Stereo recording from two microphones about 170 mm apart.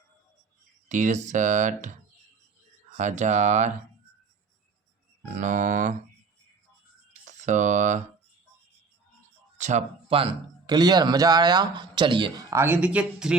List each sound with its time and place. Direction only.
0.9 s speech: 45° right (ahead or behind)
3.0 s speech: 45° right (ahead or behind)
5.4 s speech: 45° right (ahead or behind)
7.1 s a sound: 45° right (ahead or behind)
9.6 s speech: 45° right (ahead or behind); by 13.3 s 5° right (ahead or behind)